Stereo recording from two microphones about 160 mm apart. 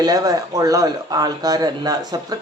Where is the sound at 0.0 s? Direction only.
25° right (ahead or behind).